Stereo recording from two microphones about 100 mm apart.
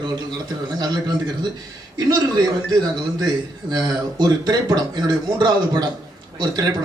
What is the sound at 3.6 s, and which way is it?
A man's voice, 40° right (ahead or behind).